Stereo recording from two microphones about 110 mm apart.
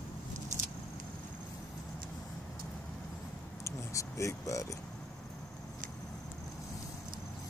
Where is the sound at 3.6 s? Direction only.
30° left (ahead or behind).